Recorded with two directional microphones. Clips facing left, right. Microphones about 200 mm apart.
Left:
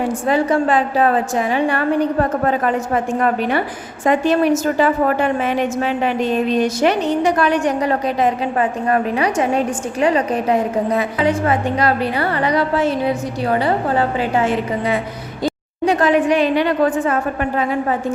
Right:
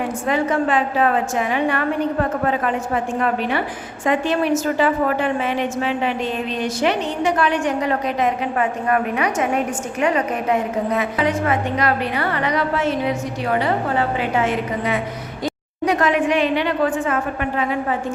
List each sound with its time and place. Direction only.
0.3 s a woman's voice: 35° left (ahead or behind)
6.5 s a woman's voice: 45° left (ahead or behind)